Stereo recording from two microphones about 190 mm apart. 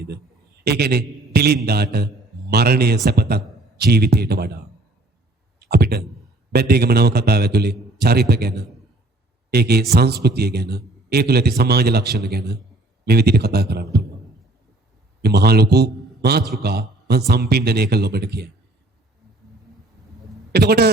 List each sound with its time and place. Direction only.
0.6 s a man's voice: 60° right (ahead or behind)
15.2 s a man's voice: 55° right (ahead or behind)
20.5 s a man's voice: 60° right (ahead or behind)